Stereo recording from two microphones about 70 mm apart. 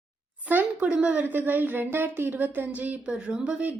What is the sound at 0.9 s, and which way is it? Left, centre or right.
A woman's voice, right.